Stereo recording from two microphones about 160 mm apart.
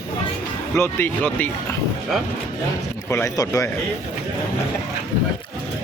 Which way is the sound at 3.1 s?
20° left (ahead or behind).